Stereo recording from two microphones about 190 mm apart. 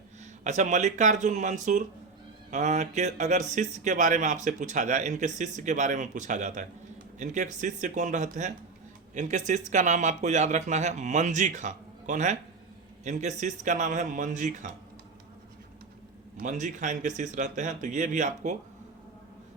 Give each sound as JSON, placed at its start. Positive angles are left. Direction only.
{"t": 0.4, "sound": "speech", "side_deg": -40}
{"t": 16.4, "sound": "speech", "side_deg": -40}